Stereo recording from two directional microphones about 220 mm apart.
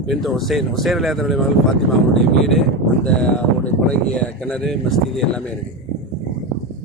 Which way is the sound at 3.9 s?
5° left (ahead or behind).